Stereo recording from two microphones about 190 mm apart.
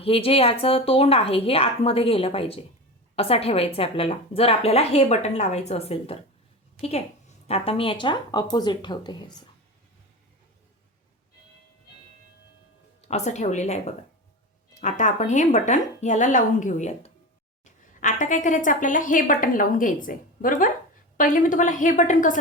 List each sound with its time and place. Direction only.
0.0 s a woman's voice: 30° left (ahead or behind)
7.4 s a woman's voice: 30° left (ahead or behind)
13.0 s a woman's voice: 35° left (ahead or behind)